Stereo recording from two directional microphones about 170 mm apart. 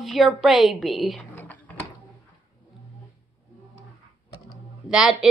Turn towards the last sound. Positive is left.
turn(degrees=-5)  # may be behind; listen again after turning